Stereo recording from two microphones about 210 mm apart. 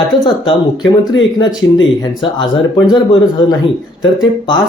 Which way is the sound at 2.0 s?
20° left (ahead or behind).